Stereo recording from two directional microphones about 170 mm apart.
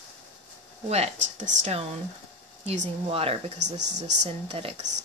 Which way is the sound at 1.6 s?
40° right (ahead or behind).